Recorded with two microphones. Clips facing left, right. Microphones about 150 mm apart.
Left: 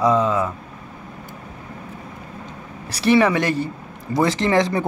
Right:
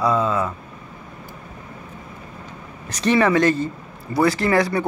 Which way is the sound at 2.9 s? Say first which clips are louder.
Left 2 dB; 10° left (ahead or behind).